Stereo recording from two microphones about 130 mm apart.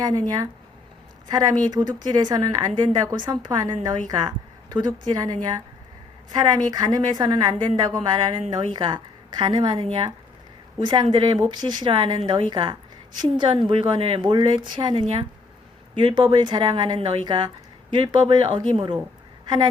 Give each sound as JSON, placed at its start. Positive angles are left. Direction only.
{"t": 0.0, "sound": "a woman's voice", "side_deg": -30}